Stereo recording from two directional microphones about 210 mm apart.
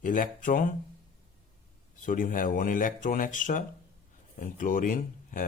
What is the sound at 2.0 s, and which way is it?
Speech, 40° left (ahead or behind).